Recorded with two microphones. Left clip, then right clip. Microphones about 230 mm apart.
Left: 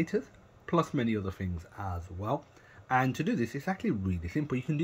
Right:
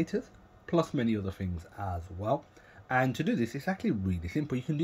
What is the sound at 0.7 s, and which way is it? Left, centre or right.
Speech, centre.